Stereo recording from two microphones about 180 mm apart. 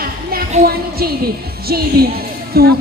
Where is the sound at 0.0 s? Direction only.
55° right (ahead or behind).